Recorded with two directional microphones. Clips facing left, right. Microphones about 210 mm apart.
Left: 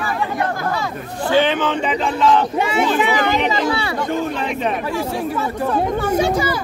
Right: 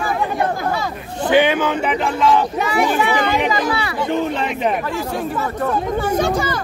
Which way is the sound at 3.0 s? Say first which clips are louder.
Even; 20° left (ahead or behind).